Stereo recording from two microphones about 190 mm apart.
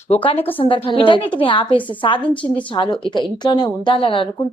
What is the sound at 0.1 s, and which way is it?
A woman's voice, 30° left (ahead or behind).